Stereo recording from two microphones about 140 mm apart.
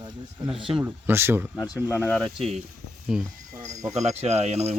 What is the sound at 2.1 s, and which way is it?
Speech, centre (ahead or behind).